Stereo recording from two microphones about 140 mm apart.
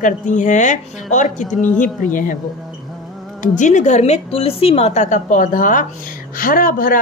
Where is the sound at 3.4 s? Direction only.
60° left (ahead or behind).